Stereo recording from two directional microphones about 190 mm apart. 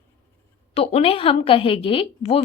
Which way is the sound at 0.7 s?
30° left (ahead or behind).